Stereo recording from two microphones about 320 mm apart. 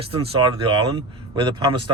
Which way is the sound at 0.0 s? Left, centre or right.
Centre.